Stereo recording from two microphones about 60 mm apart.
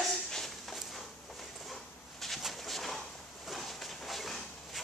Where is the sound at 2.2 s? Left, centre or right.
Centre.